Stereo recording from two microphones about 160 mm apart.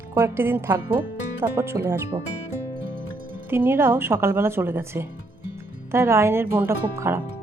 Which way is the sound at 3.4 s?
15° right (ahead or behind).